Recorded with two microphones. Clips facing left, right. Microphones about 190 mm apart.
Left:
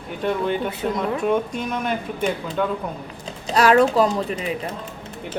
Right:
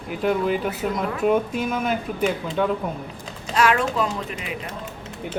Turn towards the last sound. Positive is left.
turn(degrees=35)  # may be behind; listen again after turning